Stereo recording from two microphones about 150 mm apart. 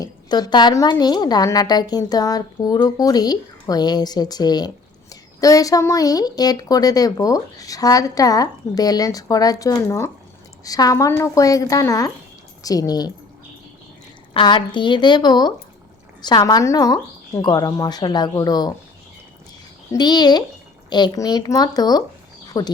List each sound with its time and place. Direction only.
0.0 s a woman's voice: 25° left (ahead or behind)
14.3 s a woman's voice: 30° left (ahead or behind)
19.9 s a woman's voice: 30° left (ahead or behind)
22.4 s a sound: 25° left (ahead or behind)